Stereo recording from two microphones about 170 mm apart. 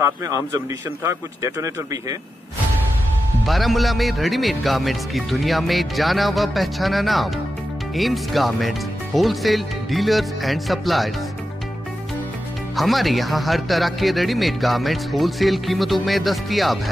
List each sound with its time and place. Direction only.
0.0 s speech: 20° right (ahead or behind)
3.4 s speech: centre (ahead or behind)
12.7 s speech: centre (ahead or behind)